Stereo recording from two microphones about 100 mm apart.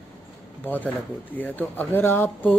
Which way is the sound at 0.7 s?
20° left (ahead or behind).